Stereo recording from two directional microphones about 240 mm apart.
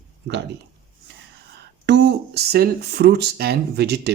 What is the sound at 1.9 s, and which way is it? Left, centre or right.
Speech, right.